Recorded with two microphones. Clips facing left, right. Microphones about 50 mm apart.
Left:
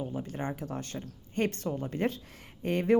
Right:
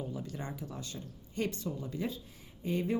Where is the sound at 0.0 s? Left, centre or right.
Left.